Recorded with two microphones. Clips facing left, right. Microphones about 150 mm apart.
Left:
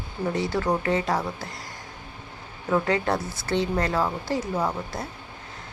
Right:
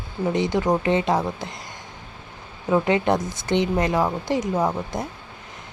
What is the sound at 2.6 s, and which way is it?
Speech, 20° right (ahead or behind).